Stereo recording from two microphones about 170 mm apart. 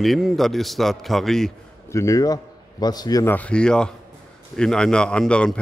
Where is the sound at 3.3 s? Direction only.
5° left (ahead or behind).